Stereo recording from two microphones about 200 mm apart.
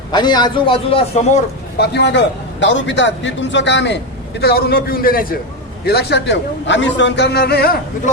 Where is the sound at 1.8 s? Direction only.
60° left (ahead or behind).